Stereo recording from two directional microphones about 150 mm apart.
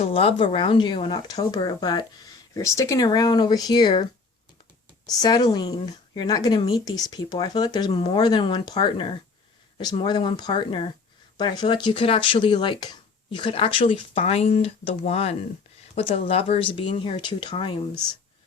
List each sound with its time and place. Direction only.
0.0 s speech: 40° left (ahead or behind)
5.0 s speech: 25° left (ahead or behind)